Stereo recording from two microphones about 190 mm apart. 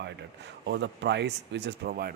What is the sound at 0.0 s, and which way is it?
Speech, 65° right (ahead or behind).